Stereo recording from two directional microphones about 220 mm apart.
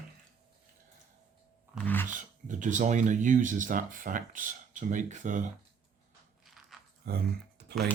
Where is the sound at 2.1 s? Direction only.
35° right (ahead or behind).